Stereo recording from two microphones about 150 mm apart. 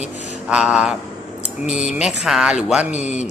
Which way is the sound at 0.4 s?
5° right (ahead or behind).